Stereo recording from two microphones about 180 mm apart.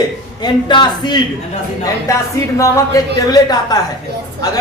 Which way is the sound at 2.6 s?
15° left (ahead or behind).